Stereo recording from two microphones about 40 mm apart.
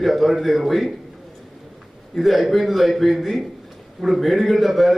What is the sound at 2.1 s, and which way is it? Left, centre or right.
A man's voice, centre.